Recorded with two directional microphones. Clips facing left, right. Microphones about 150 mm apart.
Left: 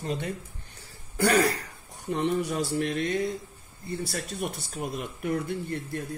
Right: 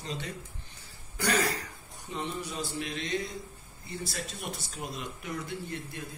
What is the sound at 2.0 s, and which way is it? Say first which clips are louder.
Speech: left 9 dB; 60° left (ahead or behind).